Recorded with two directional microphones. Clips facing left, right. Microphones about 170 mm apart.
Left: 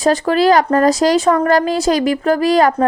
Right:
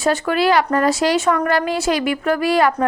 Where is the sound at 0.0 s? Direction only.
35° left (ahead or behind).